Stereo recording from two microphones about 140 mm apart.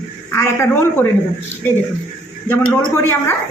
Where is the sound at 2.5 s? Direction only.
15° left (ahead or behind).